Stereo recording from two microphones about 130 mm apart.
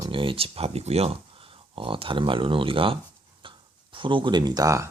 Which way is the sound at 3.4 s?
40° right (ahead or behind).